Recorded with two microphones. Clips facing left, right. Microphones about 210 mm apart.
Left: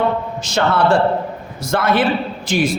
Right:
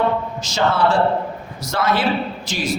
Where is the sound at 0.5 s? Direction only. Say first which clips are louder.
Left 2 dB; 60° left (ahead or behind).